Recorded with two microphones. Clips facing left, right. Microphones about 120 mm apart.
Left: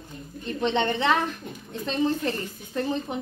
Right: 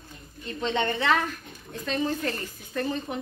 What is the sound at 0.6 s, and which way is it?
A woman's voice, 20° left (ahead or behind).